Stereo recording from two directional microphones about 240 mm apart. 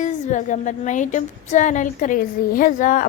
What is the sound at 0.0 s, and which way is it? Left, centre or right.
A woman's voice, left.